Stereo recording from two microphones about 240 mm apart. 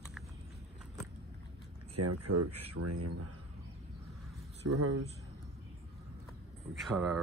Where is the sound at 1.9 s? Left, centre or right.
Right.